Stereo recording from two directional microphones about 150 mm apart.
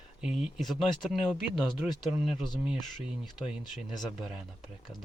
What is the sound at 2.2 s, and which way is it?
Speech, centre (ahead or behind).